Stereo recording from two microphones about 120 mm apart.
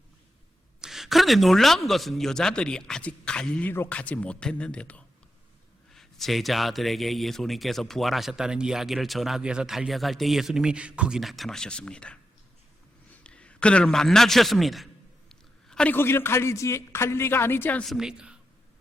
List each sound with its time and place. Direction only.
0.8 s a man's voice: 5° right (ahead or behind)
13.2 s a man's voice: 10° left (ahead or behind)
15.3 s a sound: 5° left (ahead or behind)
15.9 s speech: 20° left (ahead or behind)
17.8 s a man's voice: 5° right (ahead or behind)